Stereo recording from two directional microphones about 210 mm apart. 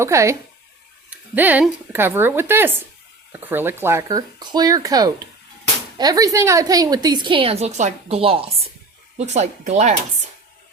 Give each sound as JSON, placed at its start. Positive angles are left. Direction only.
{"t": 0.0, "sound": "speech", "side_deg": -15}
{"t": 1.4, "sound": "a woman's voice", "side_deg": -5}